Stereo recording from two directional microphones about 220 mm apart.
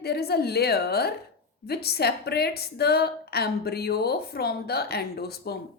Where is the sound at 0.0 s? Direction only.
45° left (ahead or behind).